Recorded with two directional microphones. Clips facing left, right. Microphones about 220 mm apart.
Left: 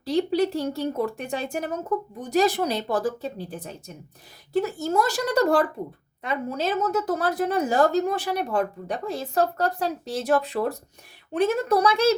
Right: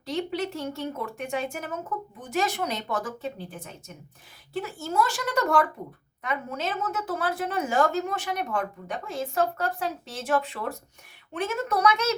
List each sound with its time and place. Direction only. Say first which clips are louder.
0.0 s a woman's voice: left 7 dB; 35° left (ahead or behind)